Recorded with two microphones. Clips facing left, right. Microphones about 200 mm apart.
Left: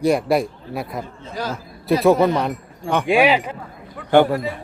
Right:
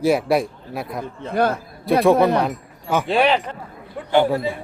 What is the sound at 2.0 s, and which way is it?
A man's voice, centre (ahead or behind).